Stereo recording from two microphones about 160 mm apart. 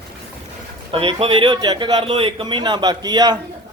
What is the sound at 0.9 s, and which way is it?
A man's voice, 35° right (ahead or behind).